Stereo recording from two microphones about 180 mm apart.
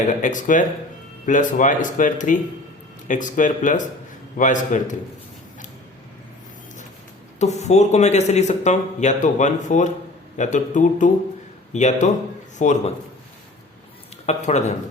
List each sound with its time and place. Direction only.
0.1 s speech: 45° left (ahead or behind)
7.3 s speech: 40° left (ahead or behind)
14.3 s speech: 40° left (ahead or behind)